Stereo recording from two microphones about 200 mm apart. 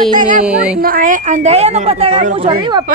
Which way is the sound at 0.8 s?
45° right (ahead or behind).